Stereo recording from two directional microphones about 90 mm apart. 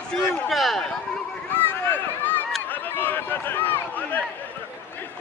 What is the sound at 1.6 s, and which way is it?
Run, 20° left (ahead or behind).